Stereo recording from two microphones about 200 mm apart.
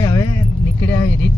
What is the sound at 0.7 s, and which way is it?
Speech, 65° left (ahead or behind).